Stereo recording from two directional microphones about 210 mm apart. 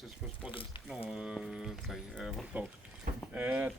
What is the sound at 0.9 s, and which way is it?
Speech, 5° right (ahead or behind).